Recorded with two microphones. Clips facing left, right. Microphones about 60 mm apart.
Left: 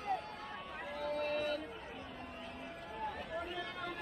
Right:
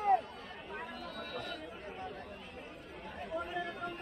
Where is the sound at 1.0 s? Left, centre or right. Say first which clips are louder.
Left 7 dB; left.